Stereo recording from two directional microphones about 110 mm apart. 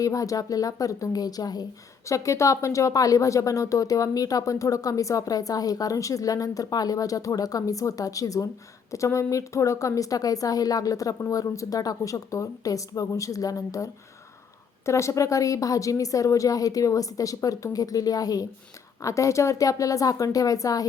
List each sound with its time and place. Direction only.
0.0 s speech: 30° left (ahead or behind)